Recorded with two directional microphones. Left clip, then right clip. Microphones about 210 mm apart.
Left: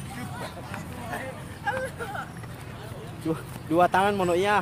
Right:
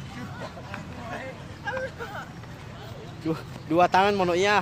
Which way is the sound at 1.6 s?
10° left (ahead or behind).